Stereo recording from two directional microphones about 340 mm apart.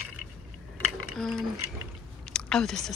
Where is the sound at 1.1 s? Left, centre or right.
Centre.